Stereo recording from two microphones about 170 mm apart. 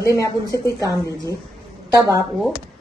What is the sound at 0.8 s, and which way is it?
Speech, 20° right (ahead or behind).